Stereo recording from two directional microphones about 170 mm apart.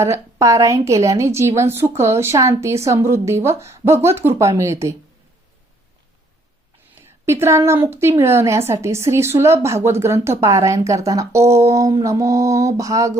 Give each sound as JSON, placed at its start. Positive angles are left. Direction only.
{"t": 0.0, "sound": "a woman's voice", "side_deg": -20}
{"t": 6.9, "sound": "a woman's voice", "side_deg": -15}